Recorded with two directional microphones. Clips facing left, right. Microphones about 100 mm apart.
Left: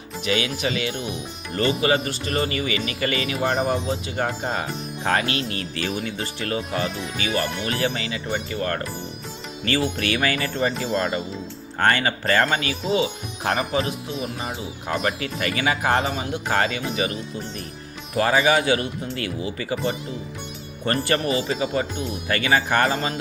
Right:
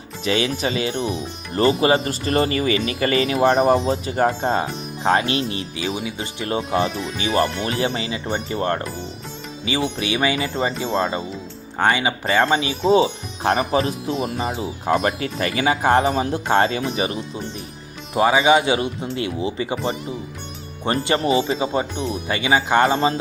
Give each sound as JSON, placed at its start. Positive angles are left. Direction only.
{"t": 0.3, "sound": "speech", "side_deg": -30}
{"t": 5.8, "sound": "speech", "side_deg": -10}
{"t": 6.5, "sound": "speech", "side_deg": -25}
{"t": 9.6, "sound": "speech", "side_deg": -15}
{"t": 10.5, "sound": "speech", "side_deg": -30}
{"t": 11.8, "sound": "speech", "side_deg": -15}
{"t": 12.8, "sound": "speech", "side_deg": -35}
{"t": 18.2, "sound": "speech", "side_deg": -10}
{"t": 18.4, "sound": "speech", "side_deg": -20}
{"t": 20.8, "sound": "speech", "side_deg": -20}